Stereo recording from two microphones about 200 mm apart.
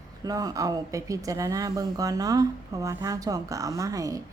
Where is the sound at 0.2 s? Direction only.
20° right (ahead or behind).